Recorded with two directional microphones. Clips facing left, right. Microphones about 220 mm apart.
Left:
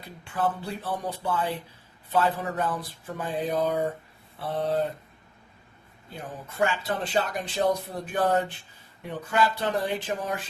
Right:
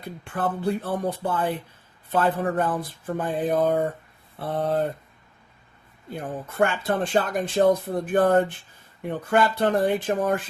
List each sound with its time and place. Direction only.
0.0 s speech: 55° right (ahead or behind)
6.1 s speech: 55° right (ahead or behind)